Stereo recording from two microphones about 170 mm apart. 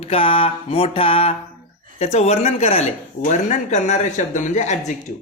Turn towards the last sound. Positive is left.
turn(degrees=45)  # may be behind; listen again after turning